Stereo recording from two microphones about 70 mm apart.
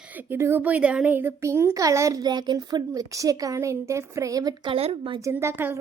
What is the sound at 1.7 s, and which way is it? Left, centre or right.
Speech, right.